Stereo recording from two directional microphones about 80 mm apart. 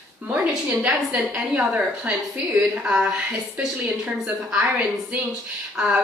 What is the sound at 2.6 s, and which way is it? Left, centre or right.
Speech, centre.